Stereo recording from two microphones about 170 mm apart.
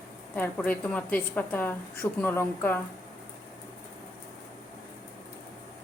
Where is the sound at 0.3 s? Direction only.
10° left (ahead or behind).